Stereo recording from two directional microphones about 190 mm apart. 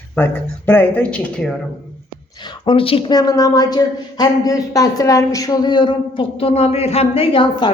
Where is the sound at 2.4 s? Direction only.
25° left (ahead or behind).